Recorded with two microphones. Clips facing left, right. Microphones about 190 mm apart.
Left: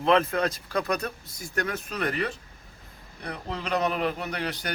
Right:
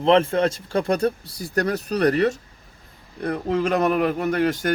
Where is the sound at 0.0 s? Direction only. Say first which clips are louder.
Right 5 dB; 30° right (ahead or behind).